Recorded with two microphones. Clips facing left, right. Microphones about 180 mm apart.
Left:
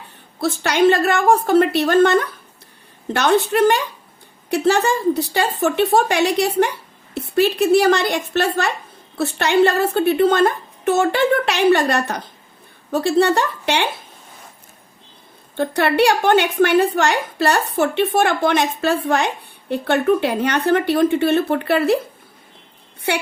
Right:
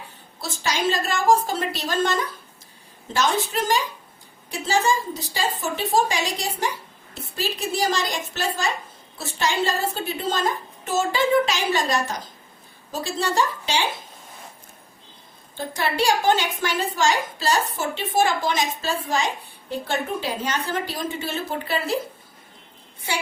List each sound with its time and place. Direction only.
0.3 s a woman's voice: 60° left (ahead or behind)
15.5 s a woman's voice: 65° left (ahead or behind)